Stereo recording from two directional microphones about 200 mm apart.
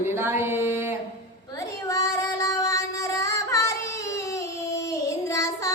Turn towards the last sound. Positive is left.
turn(degrees=15)  # may be behind; listen again after turning